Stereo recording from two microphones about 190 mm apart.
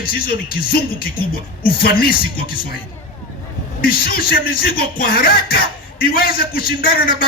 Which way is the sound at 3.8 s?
50° left (ahead or behind).